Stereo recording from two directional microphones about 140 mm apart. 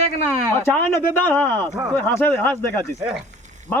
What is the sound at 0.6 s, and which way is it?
Speech, 20° left (ahead or behind).